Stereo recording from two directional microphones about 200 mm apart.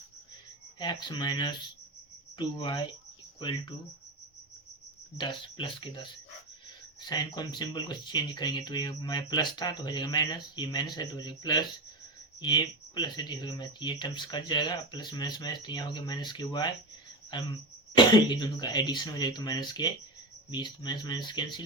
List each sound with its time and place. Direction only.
0.8 s speech: 20° left (ahead or behind)
5.1 s speech: 25° left (ahead or behind)